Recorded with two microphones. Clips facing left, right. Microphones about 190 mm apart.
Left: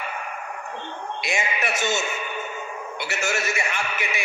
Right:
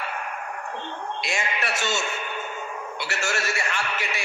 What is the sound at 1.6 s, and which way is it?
Speech, 15° left (ahead or behind).